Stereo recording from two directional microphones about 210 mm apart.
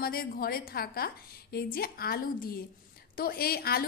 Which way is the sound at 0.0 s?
45° left (ahead or behind).